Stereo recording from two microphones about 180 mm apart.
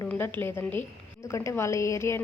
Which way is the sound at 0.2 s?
10° left (ahead or behind).